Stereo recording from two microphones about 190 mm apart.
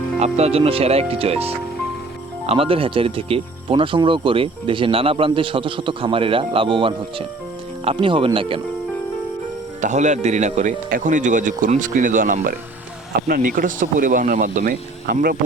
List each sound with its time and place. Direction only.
0.2 s speech: 35° right (ahead or behind)
9.8 s speech: 40° right (ahead or behind)